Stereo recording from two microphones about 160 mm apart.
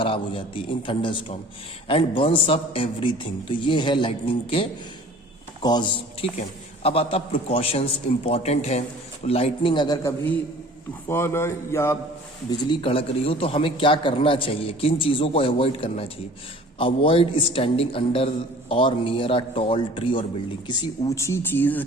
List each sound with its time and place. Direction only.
0.0 s a man's voice: 35° left (ahead or behind); by 11.9 s 15° left (ahead or behind)
12.5 s a man's voice: 30° left (ahead or behind); by 21.8 s 10° left (ahead or behind)